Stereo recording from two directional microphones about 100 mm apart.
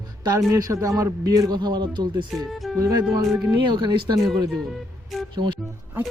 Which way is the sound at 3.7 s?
50° right (ahead or behind).